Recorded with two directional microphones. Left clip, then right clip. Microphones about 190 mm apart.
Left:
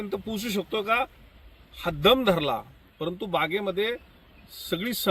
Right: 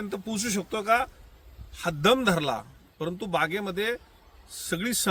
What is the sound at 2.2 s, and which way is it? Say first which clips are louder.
Speech: left 2 dB; 10° right (ahead or behind).